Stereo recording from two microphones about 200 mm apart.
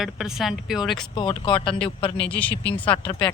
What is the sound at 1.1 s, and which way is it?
Speech, 25° left (ahead or behind).